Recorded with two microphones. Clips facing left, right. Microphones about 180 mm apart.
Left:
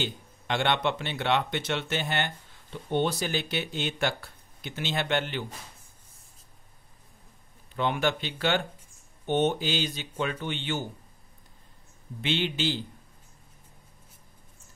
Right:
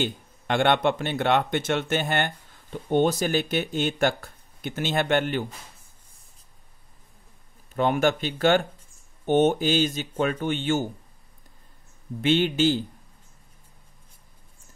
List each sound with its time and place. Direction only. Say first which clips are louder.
0.0 s speech: right 5 dB; 50° right (ahead or behind)
7.7 s speech: right 5 dB; 45° right (ahead or behind)
12.2 s speech: right 8 dB; 45° right (ahead or behind)